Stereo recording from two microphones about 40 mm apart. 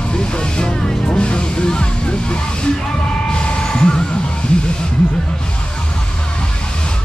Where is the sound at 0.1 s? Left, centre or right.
Left.